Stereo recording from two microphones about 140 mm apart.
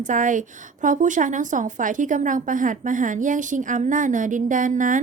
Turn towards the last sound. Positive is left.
turn(degrees=-70)  # may be behind; listen again after turning